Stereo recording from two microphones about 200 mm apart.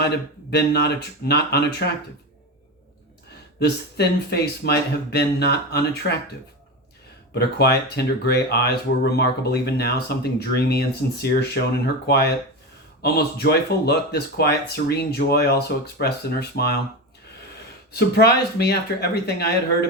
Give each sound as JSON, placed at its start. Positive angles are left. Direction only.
{"t": 0.5, "sound": "speech", "side_deg": 55}
{"t": 3.6, "sound": "speech", "side_deg": 55}
{"t": 7.3, "sound": "speech", "side_deg": 55}
{"t": 18.2, "sound": "speech", "side_deg": 55}